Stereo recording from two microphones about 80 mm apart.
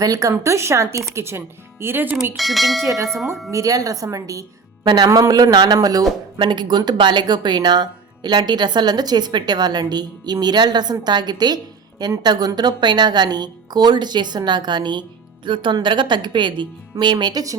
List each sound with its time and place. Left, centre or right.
0.0 s speech: right
2.3 s speech: centre
2.8 s a woman's voice: right
6.3 s a woman's voice: right
15.4 s a woman's voice: right
16.9 s speech: right